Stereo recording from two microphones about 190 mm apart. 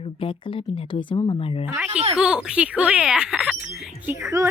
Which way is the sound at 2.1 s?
5° right (ahead or behind).